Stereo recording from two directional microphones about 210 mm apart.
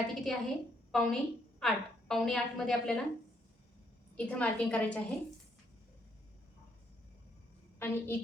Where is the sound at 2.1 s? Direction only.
Centre (ahead or behind).